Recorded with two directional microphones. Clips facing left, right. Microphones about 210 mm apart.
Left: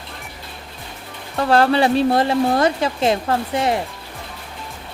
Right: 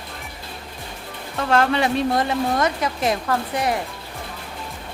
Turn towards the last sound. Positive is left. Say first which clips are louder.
# left 3 dB
turn(degrees=25)  # may be behind; listen again after turning